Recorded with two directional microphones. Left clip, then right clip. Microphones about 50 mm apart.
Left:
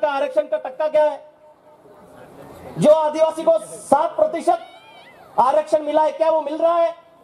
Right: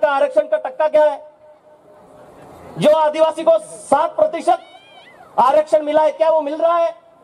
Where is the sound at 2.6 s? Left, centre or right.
Centre.